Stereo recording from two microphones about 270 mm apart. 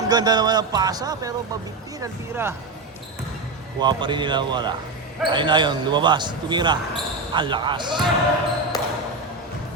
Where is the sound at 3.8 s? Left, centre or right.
Centre.